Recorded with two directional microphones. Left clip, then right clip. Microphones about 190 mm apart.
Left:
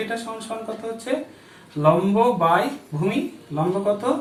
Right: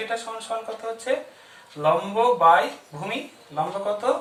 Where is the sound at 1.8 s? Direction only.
15° right (ahead or behind).